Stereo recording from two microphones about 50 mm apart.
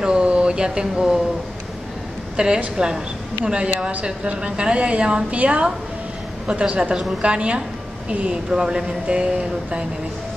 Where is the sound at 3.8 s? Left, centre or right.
Right.